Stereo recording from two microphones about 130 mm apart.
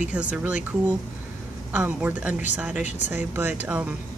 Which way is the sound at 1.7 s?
15° right (ahead or behind).